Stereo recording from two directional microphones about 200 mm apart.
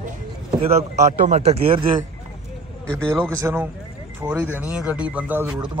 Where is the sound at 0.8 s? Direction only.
35° right (ahead or behind).